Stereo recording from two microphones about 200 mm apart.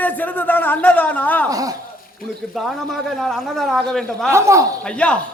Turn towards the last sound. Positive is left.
turn(degrees=5)  # may be behind; listen again after turning